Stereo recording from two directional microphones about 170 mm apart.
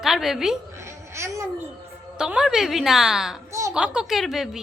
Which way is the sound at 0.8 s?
15° right (ahead or behind).